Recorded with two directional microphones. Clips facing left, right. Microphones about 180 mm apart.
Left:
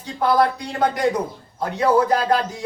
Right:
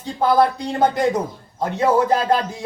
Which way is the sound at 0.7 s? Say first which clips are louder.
Right 2 dB; 25° right (ahead or behind).